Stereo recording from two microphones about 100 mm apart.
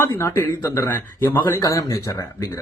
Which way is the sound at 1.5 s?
35° left (ahead or behind).